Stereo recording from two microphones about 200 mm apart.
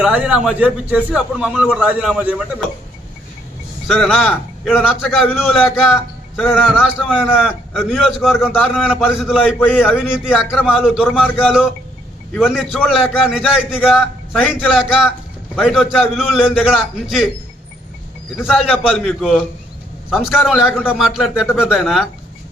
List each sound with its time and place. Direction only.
0.0 s a man's voice: 5° right (ahead or behind)
3.8 s a man's voice: centre (ahead or behind)
9.6 s a man's voice: 5° left (ahead or behind)
9.8 s a man's voice: 5° right (ahead or behind)
18.3 s a man's voice: centre (ahead or behind)